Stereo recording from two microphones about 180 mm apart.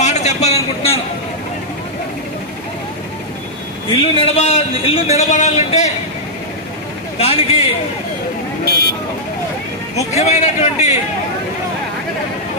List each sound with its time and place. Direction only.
0.0 s a man's voice: 40° left (ahead or behind)
3.9 s a man's voice: 35° left (ahead or behind)
7.2 s a man's voice: 35° left (ahead or behind)
9.9 s a man's voice: 35° left (ahead or behind)